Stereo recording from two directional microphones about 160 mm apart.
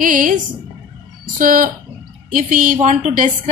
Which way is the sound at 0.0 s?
55° right (ahead or behind).